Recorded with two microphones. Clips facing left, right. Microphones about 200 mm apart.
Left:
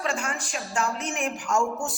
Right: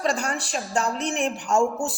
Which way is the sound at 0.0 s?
35° right (ahead or behind).